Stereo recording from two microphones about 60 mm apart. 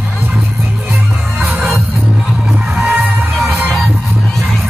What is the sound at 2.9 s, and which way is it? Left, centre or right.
Music, centre.